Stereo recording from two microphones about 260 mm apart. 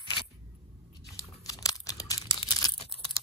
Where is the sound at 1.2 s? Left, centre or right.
Centre.